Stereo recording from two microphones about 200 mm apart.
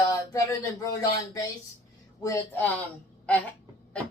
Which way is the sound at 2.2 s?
15° left (ahead or behind).